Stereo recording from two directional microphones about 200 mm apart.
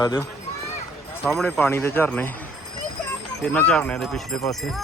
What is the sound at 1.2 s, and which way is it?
Speech, centre (ahead or behind).